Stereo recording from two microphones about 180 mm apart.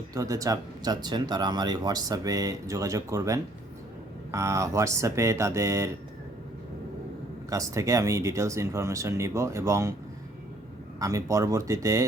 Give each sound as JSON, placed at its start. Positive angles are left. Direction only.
{"t": 0.1, "sound": "speech", "side_deg": -20}
{"t": 7.5, "sound": "speech", "side_deg": -20}
{"t": 11.0, "sound": "speech", "side_deg": -15}